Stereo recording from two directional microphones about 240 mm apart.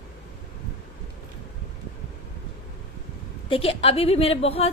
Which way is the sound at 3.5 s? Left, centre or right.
Left.